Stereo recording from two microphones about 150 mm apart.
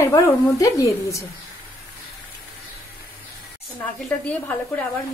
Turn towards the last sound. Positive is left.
turn(degrees=10)  # may be behind; listen again after turning